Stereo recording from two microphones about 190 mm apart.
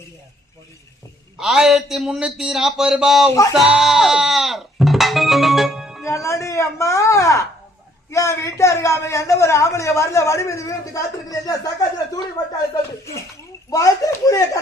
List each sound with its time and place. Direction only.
1.4 s a man's voice: centre (ahead or behind)
3.5 s music: centre (ahead or behind)
6.1 s a man's voice: 15° left (ahead or behind)
13.7 s a man's voice: 15° left (ahead or behind)